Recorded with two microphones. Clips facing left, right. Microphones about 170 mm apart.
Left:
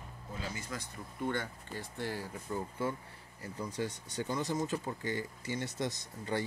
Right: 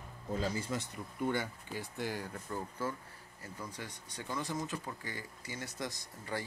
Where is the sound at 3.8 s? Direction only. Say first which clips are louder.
Left 9 dB; 25° left (ahead or behind).